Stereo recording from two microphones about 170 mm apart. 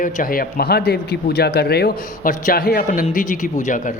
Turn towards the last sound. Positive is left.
turn(degrees=50)  # may be behind; listen again after turning